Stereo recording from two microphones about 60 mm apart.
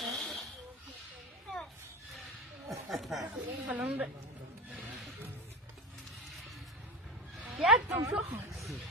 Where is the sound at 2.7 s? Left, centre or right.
Centre.